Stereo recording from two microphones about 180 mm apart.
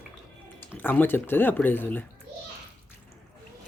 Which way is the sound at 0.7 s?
10° left (ahead or behind).